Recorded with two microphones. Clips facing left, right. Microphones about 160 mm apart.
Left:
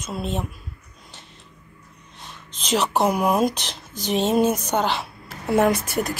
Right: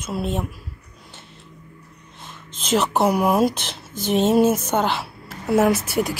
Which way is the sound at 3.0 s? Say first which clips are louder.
Right 1 dB; 5° right (ahead or behind).